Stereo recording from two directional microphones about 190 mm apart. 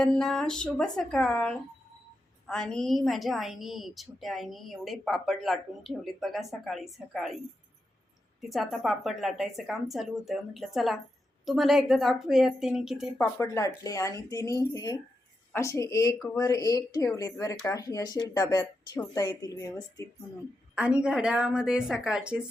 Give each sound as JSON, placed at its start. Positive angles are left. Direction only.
{"t": 0.0, "sound": "a woman's voice", "side_deg": 5}
{"t": 8.4, "sound": "a woman's voice", "side_deg": 0}
{"t": 13.4, "sound": "speech", "side_deg": 15}
{"t": 20.7, "sound": "a woman's voice", "side_deg": -5}